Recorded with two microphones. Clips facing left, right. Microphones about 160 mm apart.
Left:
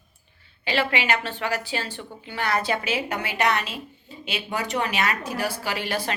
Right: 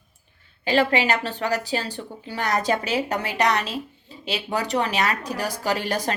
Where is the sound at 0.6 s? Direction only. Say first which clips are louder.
Right 4 dB; 40° right (ahead or behind).